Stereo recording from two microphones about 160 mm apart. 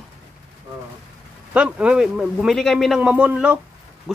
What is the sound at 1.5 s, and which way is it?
A woman's voice, 5° right (ahead or behind).